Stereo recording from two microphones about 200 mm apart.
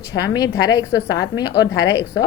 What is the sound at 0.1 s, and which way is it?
A woman's voice, 15° left (ahead or behind).